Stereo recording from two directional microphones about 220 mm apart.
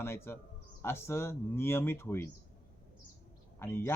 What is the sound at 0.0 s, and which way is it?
A man's voice, 10° left (ahead or behind).